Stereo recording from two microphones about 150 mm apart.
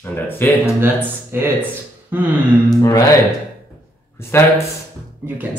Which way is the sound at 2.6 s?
20° left (ahead or behind).